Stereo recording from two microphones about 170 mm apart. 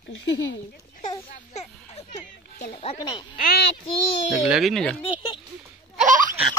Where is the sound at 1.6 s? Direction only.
45° left (ahead or behind).